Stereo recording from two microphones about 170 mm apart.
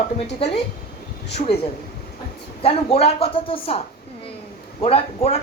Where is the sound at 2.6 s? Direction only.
35° left (ahead or behind).